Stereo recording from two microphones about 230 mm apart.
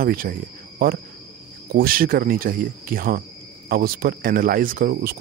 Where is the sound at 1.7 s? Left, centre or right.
Right.